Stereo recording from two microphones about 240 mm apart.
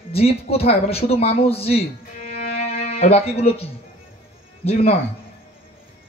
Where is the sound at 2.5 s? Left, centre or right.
Left.